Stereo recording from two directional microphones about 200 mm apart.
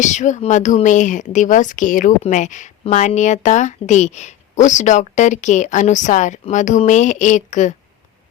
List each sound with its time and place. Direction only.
0.0 s speech: 35° left (ahead or behind)